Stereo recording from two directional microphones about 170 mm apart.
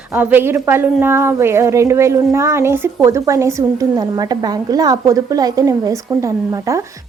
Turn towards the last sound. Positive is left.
turn(degrees=-20)  # may be behind; listen again after turning